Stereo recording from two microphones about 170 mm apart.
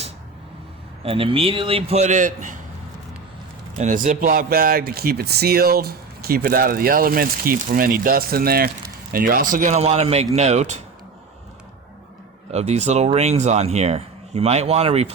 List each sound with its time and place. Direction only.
1.0 s speech: 35° right (ahead or behind)
3.8 s speech: 50° right (ahead or behind)
12.5 s speech: 40° right (ahead or behind)